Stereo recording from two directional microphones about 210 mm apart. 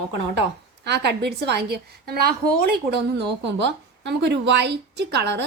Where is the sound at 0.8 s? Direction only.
55° right (ahead or behind).